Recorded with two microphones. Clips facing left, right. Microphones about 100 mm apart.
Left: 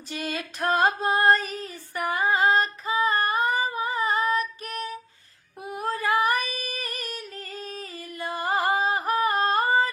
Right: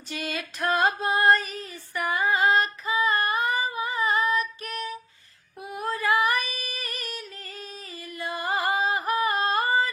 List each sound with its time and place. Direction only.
0.1 s female singing: 40° left (ahead or behind)